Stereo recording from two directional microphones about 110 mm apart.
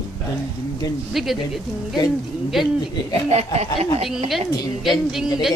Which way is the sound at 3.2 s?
80° right.